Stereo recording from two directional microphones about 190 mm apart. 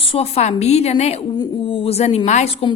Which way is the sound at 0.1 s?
35° left (ahead or behind).